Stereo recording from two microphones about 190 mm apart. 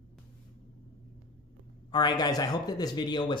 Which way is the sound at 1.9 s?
25° left (ahead or behind).